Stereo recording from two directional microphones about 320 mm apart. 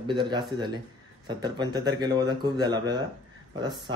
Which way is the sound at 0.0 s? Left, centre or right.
Centre.